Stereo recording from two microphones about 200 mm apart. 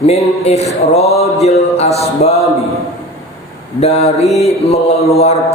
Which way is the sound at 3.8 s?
30° left (ahead or behind).